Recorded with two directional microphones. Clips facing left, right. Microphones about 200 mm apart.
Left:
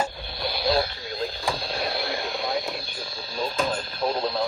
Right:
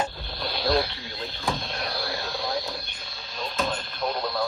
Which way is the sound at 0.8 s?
45° left (ahead or behind).